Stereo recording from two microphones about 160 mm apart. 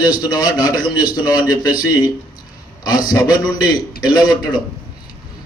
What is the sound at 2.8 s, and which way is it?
A man's voice, 25° left (ahead or behind).